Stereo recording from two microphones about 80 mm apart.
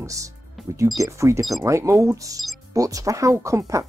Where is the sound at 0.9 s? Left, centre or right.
Right.